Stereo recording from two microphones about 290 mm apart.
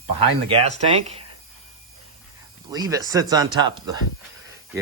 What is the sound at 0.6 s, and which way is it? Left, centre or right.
Speech, right.